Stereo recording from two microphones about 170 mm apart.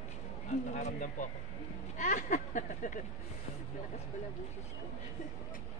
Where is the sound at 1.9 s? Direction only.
45° left (ahead or behind).